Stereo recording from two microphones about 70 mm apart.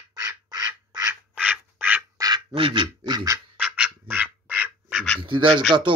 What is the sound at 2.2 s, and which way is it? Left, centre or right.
Quack, right.